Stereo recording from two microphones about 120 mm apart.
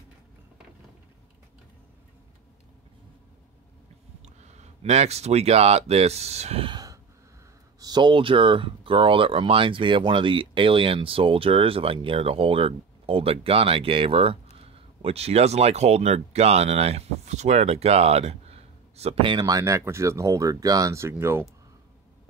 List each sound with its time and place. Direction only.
4.4 s speech: 70° right (ahead or behind)
6.7 s a sound: 35° right (ahead or behind)
7.8 s speech: 40° right (ahead or behind)
19.4 s speech: 25° right (ahead or behind)